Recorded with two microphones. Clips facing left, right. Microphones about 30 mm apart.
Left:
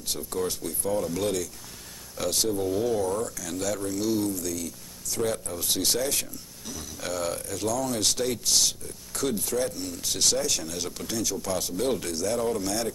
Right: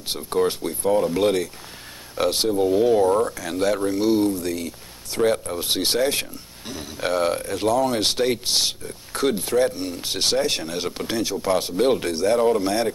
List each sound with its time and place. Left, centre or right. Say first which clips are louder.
0.0 s speech: right 8 dB; right